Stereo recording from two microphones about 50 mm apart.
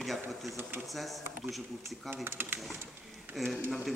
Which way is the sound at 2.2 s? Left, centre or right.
Right.